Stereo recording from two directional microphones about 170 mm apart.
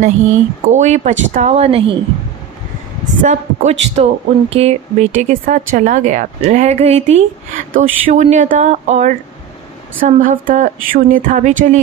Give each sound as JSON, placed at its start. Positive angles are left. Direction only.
{"t": 0.0, "sound": "speech", "side_deg": -45}
{"t": 3.2, "sound": "speech", "side_deg": -45}